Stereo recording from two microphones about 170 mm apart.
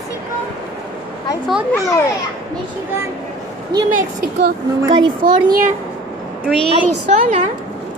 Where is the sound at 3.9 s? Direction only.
55° right (ahead or behind).